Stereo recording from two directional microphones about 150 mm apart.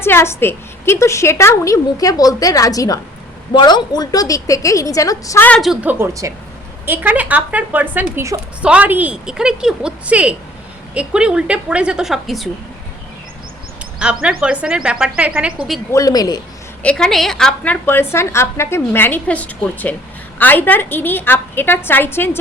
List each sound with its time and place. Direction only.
0.0 s a woman's voice: 15° left (ahead or behind)
5.5 s a woman's voice: centre (ahead or behind)
14.0 s a woman's voice: 5° right (ahead or behind)
15.9 s a woman's voice: 20° left (ahead or behind)
16.8 s a woman's voice: 5° left (ahead or behind)